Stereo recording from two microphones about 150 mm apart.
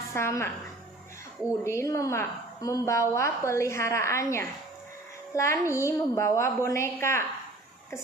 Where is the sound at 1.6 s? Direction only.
20° left (ahead or behind).